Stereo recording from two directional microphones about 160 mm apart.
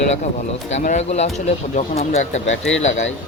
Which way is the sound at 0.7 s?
45° left (ahead or behind).